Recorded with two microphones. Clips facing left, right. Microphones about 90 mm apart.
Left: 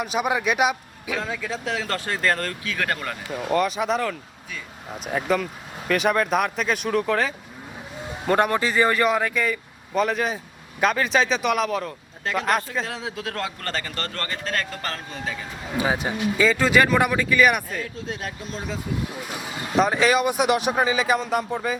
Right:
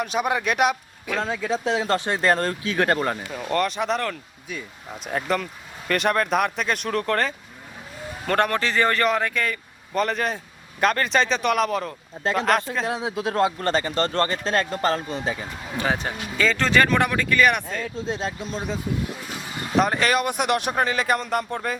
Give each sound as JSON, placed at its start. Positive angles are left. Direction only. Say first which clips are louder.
{"t": 0.0, "sound": "a man's voice", "louder": "even", "side_deg": 5}
{"t": 1.2, "sound": "a man's voice", "louder": "right 8 dB", "side_deg": -25}
{"t": 3.4, "sound": "a man's voice", "louder": "left 1 dB", "side_deg": 5}
{"t": 12.2, "sound": "a man's voice", "louder": "right 2 dB", "side_deg": -25}
{"t": 15.7, "sound": "speech", "louder": "left 2 dB", "side_deg": 10}
{"t": 18.1, "sound": "a man's voice", "louder": "right 4 dB", "side_deg": -25}
{"t": 19.7, "sound": "a man's voice", "louder": "left 1 dB", "side_deg": 0}